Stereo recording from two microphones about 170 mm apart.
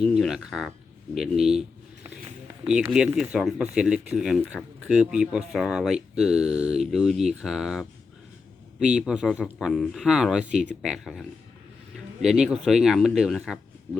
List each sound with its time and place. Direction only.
0.1 s speech: 5° right (ahead or behind)
3.2 s a man's voice: 5° right (ahead or behind)